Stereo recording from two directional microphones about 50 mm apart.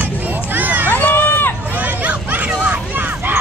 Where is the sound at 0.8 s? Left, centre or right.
Left.